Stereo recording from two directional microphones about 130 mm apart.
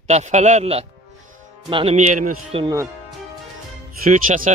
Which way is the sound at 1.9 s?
75° right (ahead or behind).